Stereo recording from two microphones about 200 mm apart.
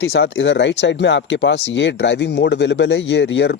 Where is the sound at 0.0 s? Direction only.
70° left (ahead or behind).